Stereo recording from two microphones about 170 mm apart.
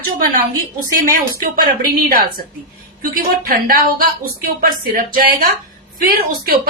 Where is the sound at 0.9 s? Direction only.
55° right (ahead or behind).